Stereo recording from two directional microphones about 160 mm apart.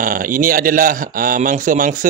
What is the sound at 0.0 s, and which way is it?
A man's voice, 60° right (ahead or behind).